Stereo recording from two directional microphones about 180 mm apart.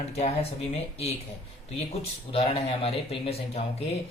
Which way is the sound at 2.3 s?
35° left (ahead or behind).